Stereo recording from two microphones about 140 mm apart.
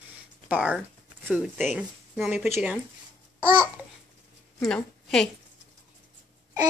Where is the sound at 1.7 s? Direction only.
5° right (ahead or behind).